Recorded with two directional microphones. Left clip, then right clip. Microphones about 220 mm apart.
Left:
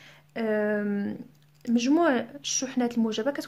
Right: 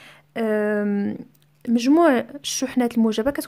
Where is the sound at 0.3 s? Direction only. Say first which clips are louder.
Right 5 dB; 35° right (ahead or behind).